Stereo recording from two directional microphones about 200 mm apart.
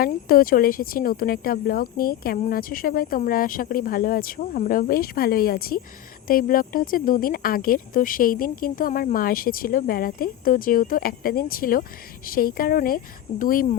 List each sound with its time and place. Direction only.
0.0 s speech: 45° left (ahead or behind)